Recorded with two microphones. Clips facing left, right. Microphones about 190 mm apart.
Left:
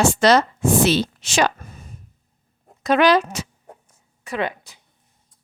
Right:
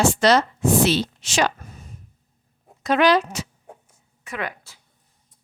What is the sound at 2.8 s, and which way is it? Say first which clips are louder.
Speech: left 2 dB; 55° left (ahead or behind).